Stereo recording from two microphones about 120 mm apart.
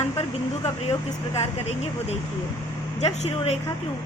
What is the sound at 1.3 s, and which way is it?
A woman's voice, 60° left (ahead or behind).